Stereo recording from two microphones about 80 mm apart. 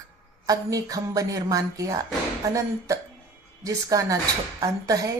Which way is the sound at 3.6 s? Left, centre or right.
Right.